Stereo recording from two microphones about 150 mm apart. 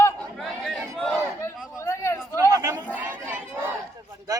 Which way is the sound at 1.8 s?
20° left (ahead or behind).